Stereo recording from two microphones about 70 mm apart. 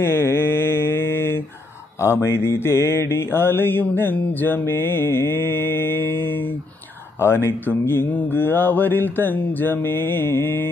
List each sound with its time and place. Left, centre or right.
0.0 s mantra: left